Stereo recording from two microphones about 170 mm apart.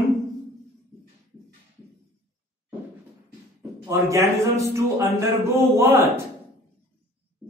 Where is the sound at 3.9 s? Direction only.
15° right (ahead or behind).